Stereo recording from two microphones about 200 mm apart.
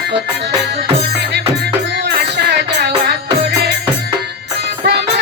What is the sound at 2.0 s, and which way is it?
Music, 55° right (ahead or behind).